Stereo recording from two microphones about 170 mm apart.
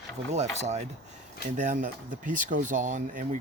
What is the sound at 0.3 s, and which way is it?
Speech, 40° right (ahead or behind).